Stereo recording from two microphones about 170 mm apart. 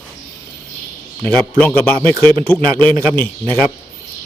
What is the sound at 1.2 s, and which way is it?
Speech, 5° left (ahead or behind).